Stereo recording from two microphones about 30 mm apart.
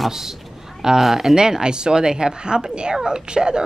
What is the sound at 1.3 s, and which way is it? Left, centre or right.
Speech, right.